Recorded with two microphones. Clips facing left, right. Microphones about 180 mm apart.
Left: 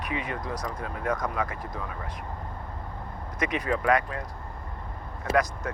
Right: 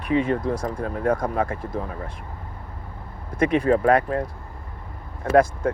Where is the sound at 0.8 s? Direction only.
45° right (ahead or behind).